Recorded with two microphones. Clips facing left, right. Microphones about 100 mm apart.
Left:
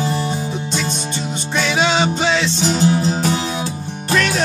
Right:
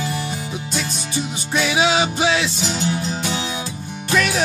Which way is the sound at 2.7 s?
35° left (ahead or behind).